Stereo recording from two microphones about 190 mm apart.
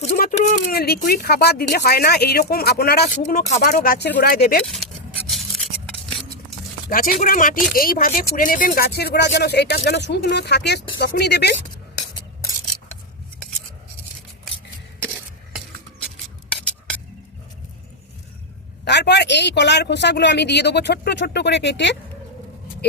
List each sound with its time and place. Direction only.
0.2 s speech: 45° left (ahead or behind)
4.6 s speech: centre (ahead or behind)
5.3 s a sound: centre (ahead or behind)
6.9 s speech: 45° left (ahead or behind)
18.9 s speech: 65° left (ahead or behind)